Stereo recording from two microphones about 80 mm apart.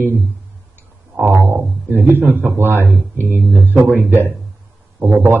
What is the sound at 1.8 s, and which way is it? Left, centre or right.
A man's voice, right.